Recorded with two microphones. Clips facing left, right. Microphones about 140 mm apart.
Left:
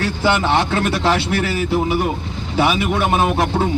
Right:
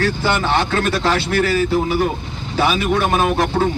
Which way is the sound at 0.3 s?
20° left (ahead or behind).